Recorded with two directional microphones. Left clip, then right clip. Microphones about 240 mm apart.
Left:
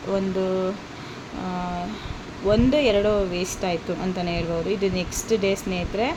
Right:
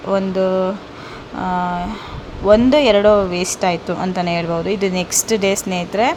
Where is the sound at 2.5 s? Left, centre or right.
Right.